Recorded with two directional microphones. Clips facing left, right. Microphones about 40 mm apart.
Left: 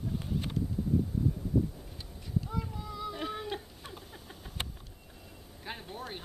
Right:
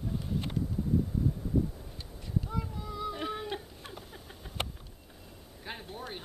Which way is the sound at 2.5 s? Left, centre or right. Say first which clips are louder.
Right 1 dB; centre.